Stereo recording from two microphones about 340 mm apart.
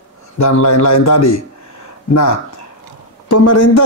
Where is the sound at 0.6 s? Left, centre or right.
Left.